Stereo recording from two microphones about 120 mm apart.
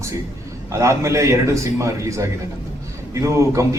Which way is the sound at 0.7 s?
25° right (ahead or behind).